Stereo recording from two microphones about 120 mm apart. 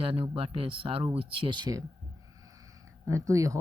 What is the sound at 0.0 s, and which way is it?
A man's voice, 45° right (ahead or behind).